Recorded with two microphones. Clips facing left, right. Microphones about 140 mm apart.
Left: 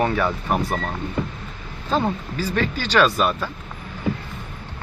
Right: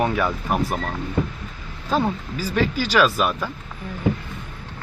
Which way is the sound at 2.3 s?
10° right (ahead or behind).